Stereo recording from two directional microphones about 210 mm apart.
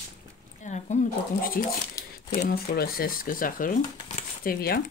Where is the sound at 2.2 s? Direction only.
45° left (ahead or behind).